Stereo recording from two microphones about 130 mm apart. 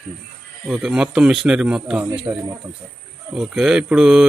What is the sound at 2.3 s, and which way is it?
Speech, 30° right (ahead or behind).